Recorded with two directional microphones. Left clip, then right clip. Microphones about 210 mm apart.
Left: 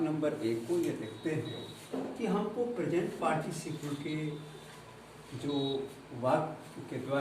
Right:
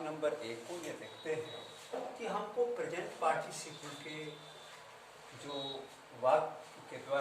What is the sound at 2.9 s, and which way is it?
Speech, 10° right (ahead or behind).